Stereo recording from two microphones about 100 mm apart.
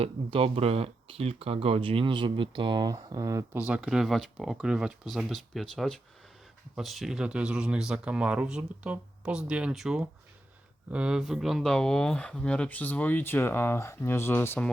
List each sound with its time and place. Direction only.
0.0 s speech: 75° right (ahead or behind); by 2.9 s 50° right (ahead or behind)
3.1 s speech: 35° right (ahead or behind)
3.5 s speech: 15° right (ahead or behind); by 14.6 s 25° left (ahead or behind)